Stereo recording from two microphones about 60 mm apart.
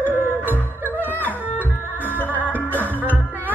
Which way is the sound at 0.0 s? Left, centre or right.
Left.